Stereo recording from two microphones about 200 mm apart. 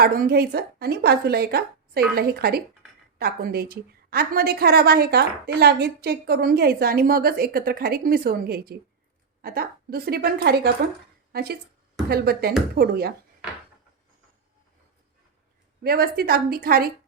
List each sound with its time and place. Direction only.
0.0 s a woman's voice: 50° right (ahead or behind)
15.8 s a woman's voice: 50° right (ahead or behind)